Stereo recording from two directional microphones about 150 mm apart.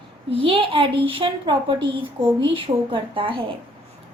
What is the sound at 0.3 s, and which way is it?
A woman's voice, 40° right (ahead or behind).